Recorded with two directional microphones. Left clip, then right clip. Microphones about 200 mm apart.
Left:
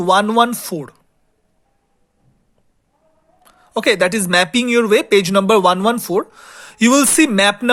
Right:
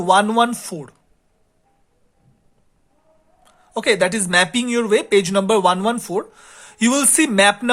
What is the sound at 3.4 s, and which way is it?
Speech, 25° left (ahead or behind).